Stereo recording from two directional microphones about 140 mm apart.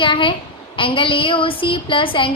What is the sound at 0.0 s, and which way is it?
A woman's voice, 35° left (ahead or behind).